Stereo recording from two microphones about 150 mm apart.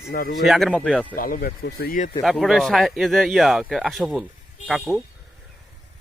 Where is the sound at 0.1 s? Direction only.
85° left.